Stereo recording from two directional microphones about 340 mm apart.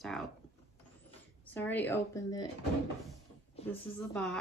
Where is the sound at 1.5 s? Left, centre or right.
Centre.